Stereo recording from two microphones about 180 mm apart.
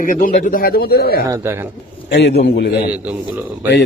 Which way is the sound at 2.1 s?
65° left (ahead or behind).